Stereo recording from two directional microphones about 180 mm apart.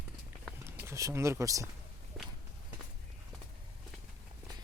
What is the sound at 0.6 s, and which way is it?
Speech, 15° right (ahead or behind).